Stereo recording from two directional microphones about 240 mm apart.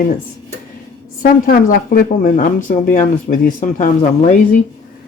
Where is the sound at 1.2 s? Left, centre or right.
Left.